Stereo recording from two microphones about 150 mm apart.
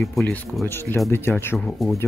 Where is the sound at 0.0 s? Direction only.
5° left (ahead or behind).